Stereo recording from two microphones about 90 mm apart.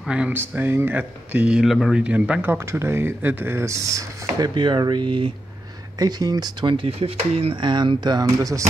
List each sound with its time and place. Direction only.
0.3 s speech: 25° right (ahead or behind)
2.5 s speech: 30° right (ahead or behind)
4.4 s speech: 60° right (ahead or behind)
5.9 s speech: 45° right (ahead or behind)
6.6 s speech: 70° right (ahead or behind); by 8.6 s 40° right (ahead or behind)